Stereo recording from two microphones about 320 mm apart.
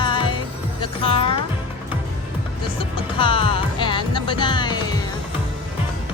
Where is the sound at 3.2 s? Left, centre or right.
Centre.